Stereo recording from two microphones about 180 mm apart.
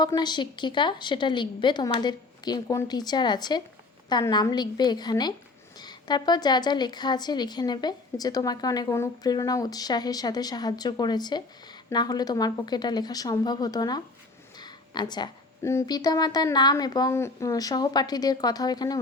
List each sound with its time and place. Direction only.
0.0 s a woman's voice: 25° left (ahead or behind)